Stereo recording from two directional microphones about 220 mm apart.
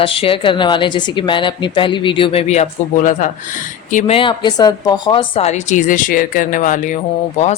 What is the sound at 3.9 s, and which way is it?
Speech, 25° left (ahead or behind).